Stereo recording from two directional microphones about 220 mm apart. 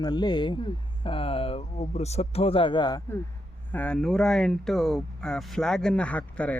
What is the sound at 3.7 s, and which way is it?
Speech, 5° left (ahead or behind).